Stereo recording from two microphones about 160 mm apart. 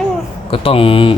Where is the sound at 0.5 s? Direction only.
35° left (ahead or behind).